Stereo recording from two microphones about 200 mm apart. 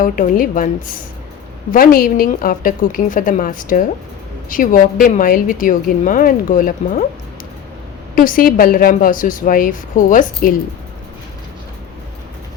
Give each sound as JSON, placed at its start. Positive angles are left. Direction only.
{"t": 0.0, "sound": "a woman's voice", "side_deg": 40}
{"t": 8.1, "sound": "a woman's voice", "side_deg": 45}